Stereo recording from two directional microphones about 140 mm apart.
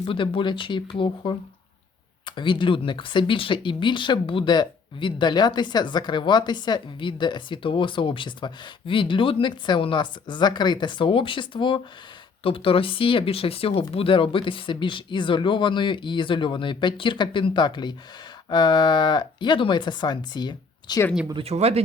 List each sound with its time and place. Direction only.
0.0 s speech: 35° left (ahead or behind)
21.4 s speech: 50° right (ahead or behind)